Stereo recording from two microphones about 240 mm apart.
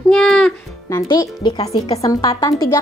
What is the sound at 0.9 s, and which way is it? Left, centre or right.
A woman's voice, centre.